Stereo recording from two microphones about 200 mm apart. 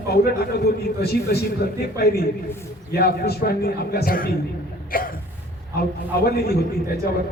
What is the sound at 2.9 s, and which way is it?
A man's voice, 50° left (ahead or behind).